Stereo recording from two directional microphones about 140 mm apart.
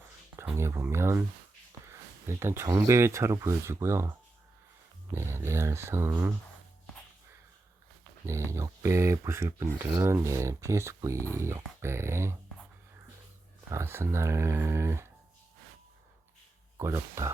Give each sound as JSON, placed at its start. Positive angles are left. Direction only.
{"t": 0.5, "sound": "speech", "side_deg": -20}
{"t": 8.4, "sound": "speech", "side_deg": -20}
{"t": 13.7, "sound": "speech", "side_deg": -20}
{"t": 16.7, "sound": "speech", "side_deg": -20}